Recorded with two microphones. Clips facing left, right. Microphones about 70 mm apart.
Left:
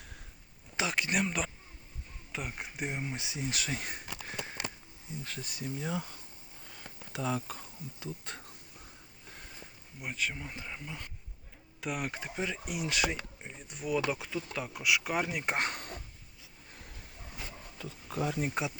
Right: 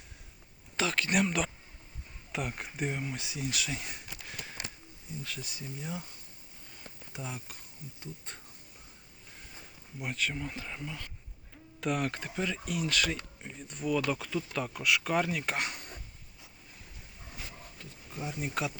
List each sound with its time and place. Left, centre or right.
0.8 s speech: centre
1.1 s speech: centre
3.0 s speech: left
5.8 s speech: left
6.7 s a sound: left
10.0 s speech: centre
17.8 s speech: left